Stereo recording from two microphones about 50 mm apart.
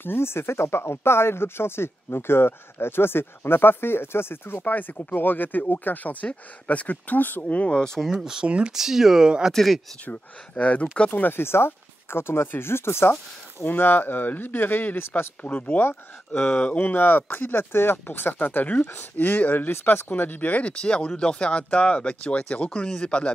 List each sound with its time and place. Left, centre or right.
0.0 s speech: left
4.6 s speech: left; by 8.0 s centre
8.1 s speech: centre
8.5 s speech: right
8.7 s speech: centre
9.5 s speech: centre
10.0 s speech: left
13.7 s speech: left
15.4 s speech: left
16.9 s speech: left
18.9 s speech: left
20.7 s speech: centre